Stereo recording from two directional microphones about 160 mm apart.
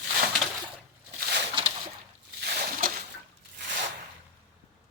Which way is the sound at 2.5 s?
60° right (ahead or behind).